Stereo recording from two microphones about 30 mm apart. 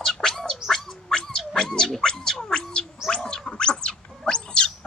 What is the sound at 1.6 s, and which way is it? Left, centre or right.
Dog, left.